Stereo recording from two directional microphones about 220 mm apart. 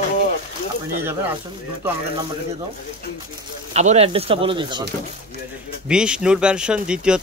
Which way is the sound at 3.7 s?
30° right (ahead or behind).